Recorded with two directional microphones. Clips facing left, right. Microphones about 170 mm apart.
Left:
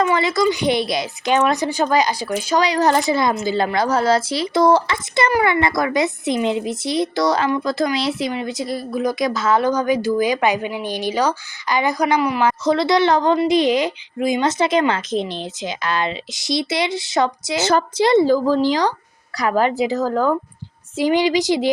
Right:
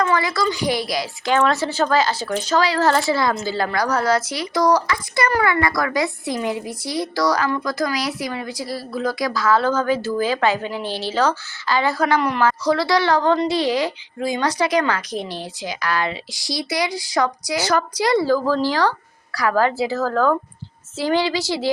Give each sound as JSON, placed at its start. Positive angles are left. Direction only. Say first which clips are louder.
{"t": 0.0, "sound": "a woman's voice", "louder": "left 3 dB", "side_deg": 20}